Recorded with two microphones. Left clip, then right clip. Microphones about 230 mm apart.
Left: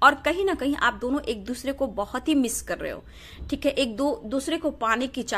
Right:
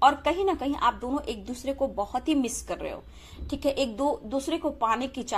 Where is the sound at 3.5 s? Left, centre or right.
Left.